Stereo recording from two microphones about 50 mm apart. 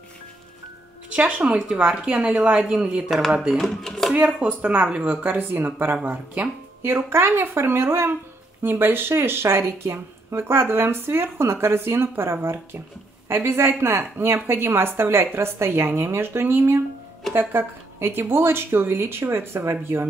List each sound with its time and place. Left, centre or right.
1.1 s a woman's voice: right
3.5 s speech: centre
4.4 s speech: right
6.0 s speech: right
6.8 s speech: right